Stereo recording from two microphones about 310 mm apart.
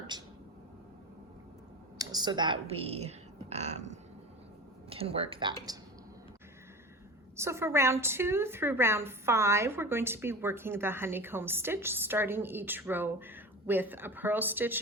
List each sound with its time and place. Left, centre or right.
0.1 s speech: centre
2.0 s a woman's voice: centre
7.3 s a woman's voice: centre